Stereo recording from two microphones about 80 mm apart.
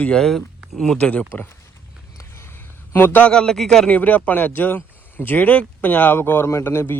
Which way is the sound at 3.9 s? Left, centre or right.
Centre.